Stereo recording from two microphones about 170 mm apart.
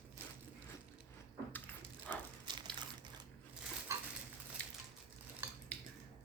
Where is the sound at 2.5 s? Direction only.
25° right (ahead or behind).